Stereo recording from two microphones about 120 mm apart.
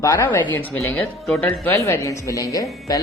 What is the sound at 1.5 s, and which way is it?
Speech, 20° left (ahead or behind).